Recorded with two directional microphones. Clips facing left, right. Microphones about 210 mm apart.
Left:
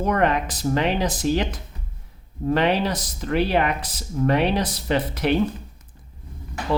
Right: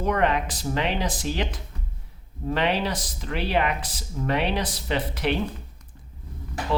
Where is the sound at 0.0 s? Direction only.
45° left (ahead or behind).